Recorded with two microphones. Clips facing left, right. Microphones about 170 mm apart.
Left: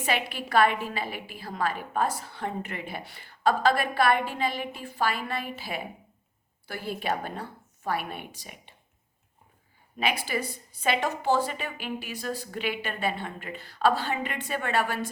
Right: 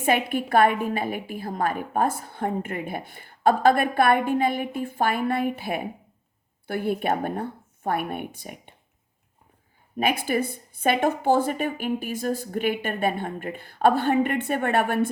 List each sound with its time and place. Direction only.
0.0 s a woman's voice: 50° right (ahead or behind)
10.0 s a woman's voice: 50° right (ahead or behind)